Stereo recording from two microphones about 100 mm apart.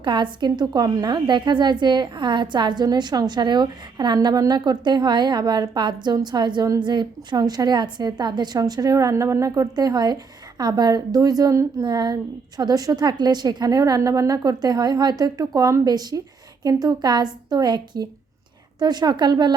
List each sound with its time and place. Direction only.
0.0 s a woman's voice: 50° right (ahead or behind)